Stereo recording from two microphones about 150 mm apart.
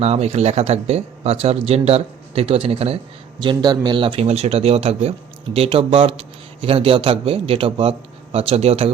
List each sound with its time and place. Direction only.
0.0 s speech: 45° right (ahead or behind)
3.4 s speech: 30° right (ahead or behind)